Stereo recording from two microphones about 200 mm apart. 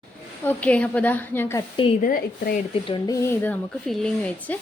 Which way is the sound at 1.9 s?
45° left (ahead or behind).